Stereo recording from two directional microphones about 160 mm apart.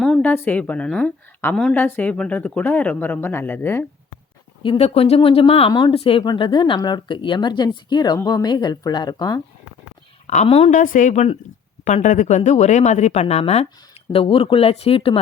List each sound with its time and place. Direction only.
0.0 s a woman's voice: 5° left (ahead or behind)
4.6 s speech: 35° left (ahead or behind)
10.2 s speech: 40° left (ahead or behind)